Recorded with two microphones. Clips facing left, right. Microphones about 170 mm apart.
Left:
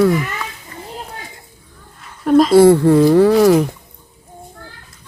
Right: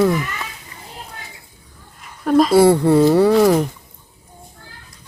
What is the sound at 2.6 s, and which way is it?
Speech, 10° right (ahead or behind).